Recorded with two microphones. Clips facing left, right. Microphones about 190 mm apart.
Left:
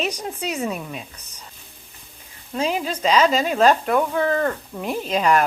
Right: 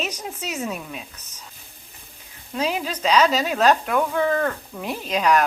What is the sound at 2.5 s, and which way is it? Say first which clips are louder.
Speech: left 1 dB; 5° right (ahead or behind).